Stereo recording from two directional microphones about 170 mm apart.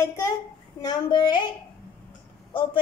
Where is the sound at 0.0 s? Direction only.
15° left (ahead or behind).